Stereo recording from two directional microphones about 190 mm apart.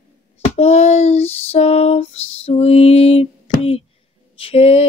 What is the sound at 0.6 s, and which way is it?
Child singing, 35° left (ahead or behind).